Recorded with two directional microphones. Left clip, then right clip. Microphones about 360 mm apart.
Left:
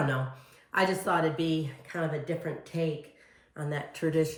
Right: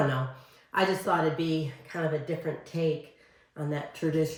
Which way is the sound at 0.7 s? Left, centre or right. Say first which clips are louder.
Right 1 dB; centre.